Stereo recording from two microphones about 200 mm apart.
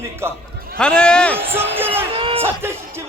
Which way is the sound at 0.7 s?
5° left (ahead or behind).